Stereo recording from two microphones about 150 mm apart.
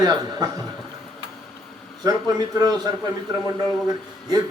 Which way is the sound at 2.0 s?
25° right (ahead or behind).